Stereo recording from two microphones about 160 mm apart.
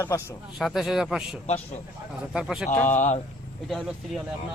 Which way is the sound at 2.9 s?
45° left (ahead or behind).